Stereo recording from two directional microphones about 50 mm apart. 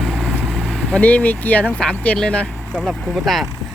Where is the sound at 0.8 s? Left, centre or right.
Left.